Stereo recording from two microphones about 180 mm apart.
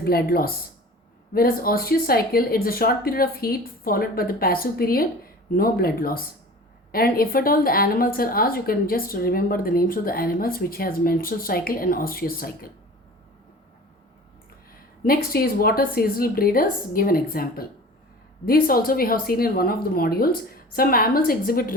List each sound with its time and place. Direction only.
0.0 s a woman's voice: 55° left (ahead or behind)
15.0 s speech: 55° left (ahead or behind)